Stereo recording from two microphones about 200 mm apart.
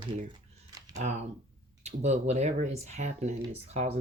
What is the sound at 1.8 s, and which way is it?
Speech, 35° right (ahead or behind).